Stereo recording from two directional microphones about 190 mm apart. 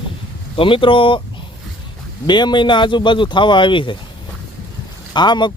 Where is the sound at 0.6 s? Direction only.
25° left (ahead or behind).